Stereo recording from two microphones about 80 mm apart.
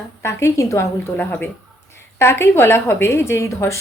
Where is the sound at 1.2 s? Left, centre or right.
Left.